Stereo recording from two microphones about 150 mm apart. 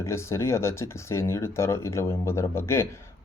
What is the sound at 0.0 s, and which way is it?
Speech, 20° left (ahead or behind).